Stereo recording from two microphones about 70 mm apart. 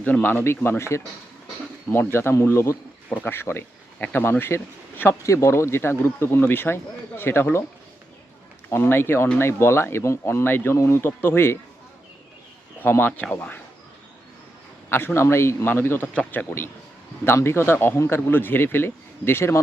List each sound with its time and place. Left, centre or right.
0.0 s speech: left
5.2 s speech: left
8.7 s speech: left
12.8 s speech: left
14.8 s speech: left
16.1 s speech: left
17.2 s speech: left
18.3 s speech: left